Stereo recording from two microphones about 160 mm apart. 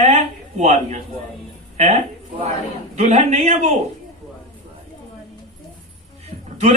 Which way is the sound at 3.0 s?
45° right (ahead or behind).